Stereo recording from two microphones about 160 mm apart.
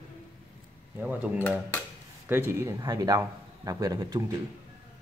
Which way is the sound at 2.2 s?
15° right (ahead or behind).